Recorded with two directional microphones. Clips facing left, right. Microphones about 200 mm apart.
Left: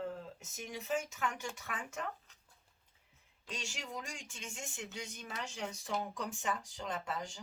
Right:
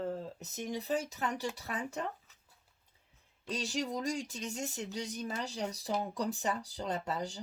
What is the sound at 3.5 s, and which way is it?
Speech, 35° right (ahead or behind).